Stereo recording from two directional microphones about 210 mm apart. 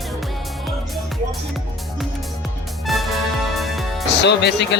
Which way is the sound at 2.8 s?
Centre (ahead or behind).